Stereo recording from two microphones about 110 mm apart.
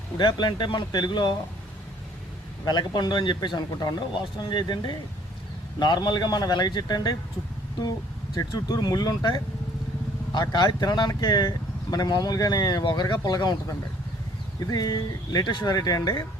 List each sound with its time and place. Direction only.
0.2 s speech: 40° left (ahead or behind)
2.6 s speech: 40° left (ahead or behind)
8.4 s speech: 35° left (ahead or behind)
14.7 s speech: 40° left (ahead or behind)